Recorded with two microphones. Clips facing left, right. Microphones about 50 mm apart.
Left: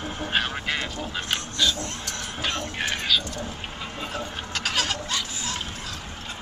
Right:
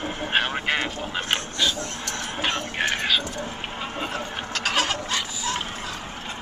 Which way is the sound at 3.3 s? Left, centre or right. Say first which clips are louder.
Right 2 dB; right.